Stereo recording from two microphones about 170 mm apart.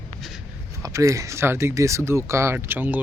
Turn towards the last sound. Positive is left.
turn(degrees=-10)  # may be behind; listen again after turning